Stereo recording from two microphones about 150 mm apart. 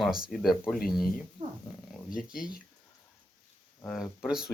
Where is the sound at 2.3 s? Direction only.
70° left (ahead or behind).